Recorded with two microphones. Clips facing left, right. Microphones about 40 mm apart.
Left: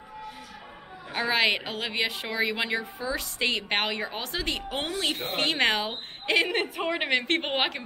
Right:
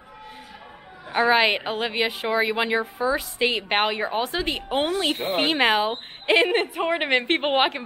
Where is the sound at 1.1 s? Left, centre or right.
Centre.